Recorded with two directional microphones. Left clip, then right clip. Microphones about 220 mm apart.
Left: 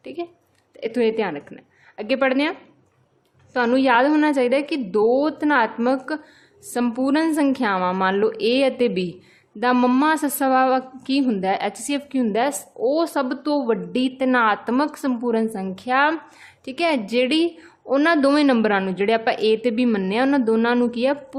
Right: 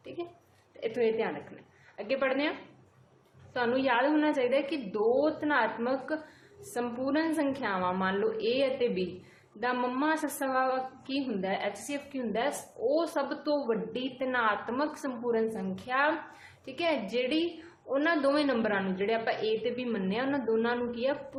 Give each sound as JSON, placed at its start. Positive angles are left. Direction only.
{"t": 0.2, "sound": "a woman's voice", "side_deg": 60}